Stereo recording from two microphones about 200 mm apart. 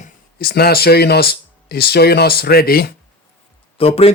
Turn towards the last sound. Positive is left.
turn(degrees=30)  # may be behind; listen again after turning